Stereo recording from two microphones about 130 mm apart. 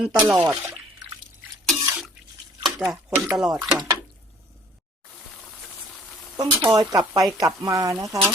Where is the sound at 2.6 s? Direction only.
Centre (ahead or behind).